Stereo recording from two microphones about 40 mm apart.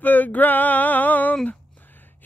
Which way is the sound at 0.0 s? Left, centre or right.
Left.